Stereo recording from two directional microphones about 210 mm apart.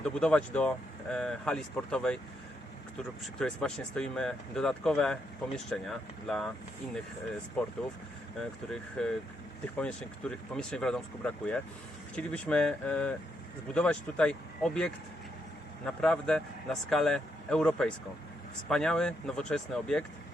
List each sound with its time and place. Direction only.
0.0 s speech: 5° left (ahead or behind)
3.3 s speech: 5° left (ahead or behind)
8.4 s speech: 5° left (ahead or behind)
16.0 s speech: 5° left (ahead or behind)